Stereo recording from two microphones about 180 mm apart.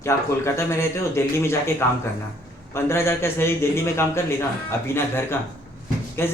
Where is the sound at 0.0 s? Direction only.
15° left (ahead or behind).